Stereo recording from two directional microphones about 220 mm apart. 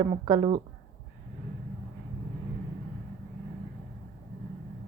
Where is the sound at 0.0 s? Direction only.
20° right (ahead or behind).